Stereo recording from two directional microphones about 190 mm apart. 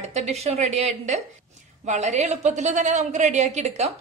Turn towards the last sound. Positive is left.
turn(degrees=-35)  # may be behind; listen again after turning